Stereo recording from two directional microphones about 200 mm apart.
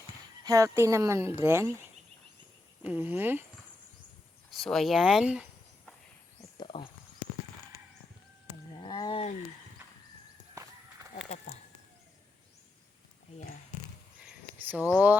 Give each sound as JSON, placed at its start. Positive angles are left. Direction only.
{"t": 0.4, "sound": "speech", "side_deg": -15}
{"t": 2.8, "sound": "speech", "side_deg": -10}
{"t": 4.5, "sound": "speech", "side_deg": 0}
{"t": 6.6, "sound": "a sound", "side_deg": 25}
{"t": 8.8, "sound": "wild animals", "side_deg": 20}
{"t": 14.7, "sound": "speech", "side_deg": -5}